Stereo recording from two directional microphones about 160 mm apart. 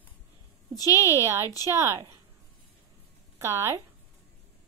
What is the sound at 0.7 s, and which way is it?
Speech, 20° left (ahead or behind).